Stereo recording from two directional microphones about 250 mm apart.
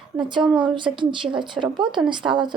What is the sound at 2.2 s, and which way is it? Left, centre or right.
Speech, centre.